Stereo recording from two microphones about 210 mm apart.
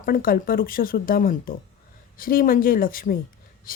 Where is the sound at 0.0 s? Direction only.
40° left (ahead or behind).